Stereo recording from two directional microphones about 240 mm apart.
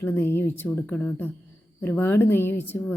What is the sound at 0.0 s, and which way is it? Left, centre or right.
A woman's voice, centre.